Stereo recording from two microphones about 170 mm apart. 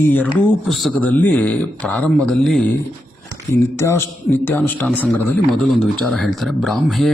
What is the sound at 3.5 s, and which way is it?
Speech, 15° left (ahead or behind).